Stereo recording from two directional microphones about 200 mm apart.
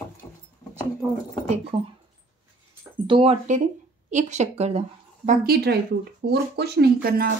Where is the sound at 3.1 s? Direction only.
30° right (ahead or behind); by 7.3 s 50° right (ahead or behind).